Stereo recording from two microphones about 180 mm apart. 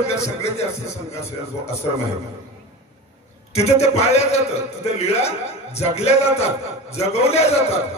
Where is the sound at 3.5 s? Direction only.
35° left (ahead or behind).